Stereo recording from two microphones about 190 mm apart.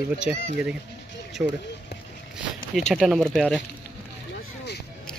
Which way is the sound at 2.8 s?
Centre (ahead or behind).